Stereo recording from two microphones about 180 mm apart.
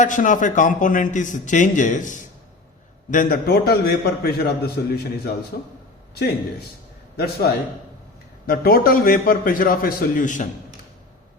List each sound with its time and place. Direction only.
0.0 s a man's voice: 45° left (ahead or behind)